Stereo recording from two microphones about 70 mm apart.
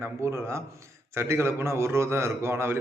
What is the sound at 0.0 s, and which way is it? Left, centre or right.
A man's voice, right.